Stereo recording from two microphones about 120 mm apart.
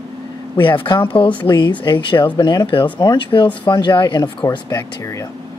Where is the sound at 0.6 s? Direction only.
45° left (ahead or behind).